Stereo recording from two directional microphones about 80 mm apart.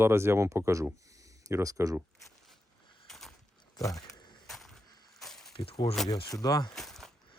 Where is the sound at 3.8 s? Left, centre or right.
Left.